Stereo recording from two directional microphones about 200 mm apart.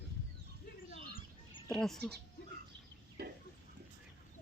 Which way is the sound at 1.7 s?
Centre (ahead or behind).